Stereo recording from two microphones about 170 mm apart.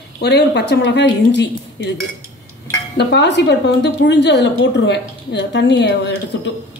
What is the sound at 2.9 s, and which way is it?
A woman's voice, 90° left.